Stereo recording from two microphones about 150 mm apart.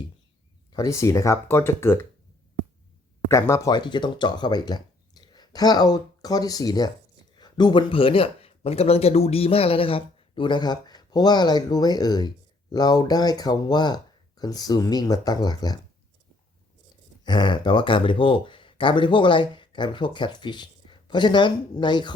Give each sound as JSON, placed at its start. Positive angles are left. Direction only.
{"t": 0.7, "sound": "speech", "side_deg": 20}
{"t": 3.2, "sound": "speech", "side_deg": 15}
{"t": 17.2, "sound": "speech", "side_deg": 30}